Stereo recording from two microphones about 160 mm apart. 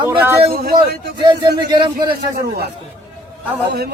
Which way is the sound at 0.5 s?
75° right (ahead or behind).